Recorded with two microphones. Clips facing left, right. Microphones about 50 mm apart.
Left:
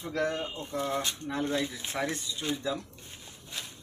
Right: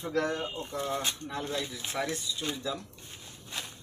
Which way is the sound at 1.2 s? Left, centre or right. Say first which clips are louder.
Left 4 dB; left.